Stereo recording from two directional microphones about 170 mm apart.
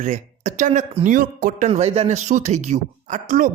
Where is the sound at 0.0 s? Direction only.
45° right (ahead or behind).